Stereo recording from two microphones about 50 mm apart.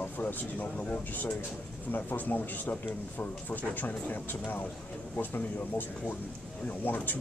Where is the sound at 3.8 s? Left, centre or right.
Left.